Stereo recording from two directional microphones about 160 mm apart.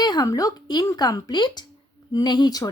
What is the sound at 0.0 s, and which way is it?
A woman's voice, 25° left (ahead or behind).